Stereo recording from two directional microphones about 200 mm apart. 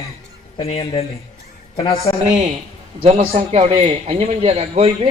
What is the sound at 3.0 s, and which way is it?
A man's voice, 30° right (ahead or behind).